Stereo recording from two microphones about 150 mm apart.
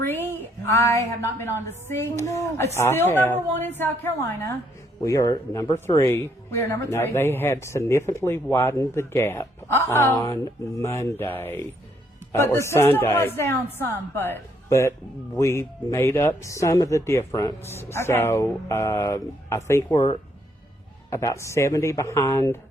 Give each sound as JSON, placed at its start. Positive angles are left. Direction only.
{"t": 0.0, "sound": "a woman's voice", "side_deg": 15}